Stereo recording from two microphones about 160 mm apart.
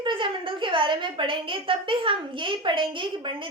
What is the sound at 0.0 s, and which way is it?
A woman's voice, 30° right (ahead or behind).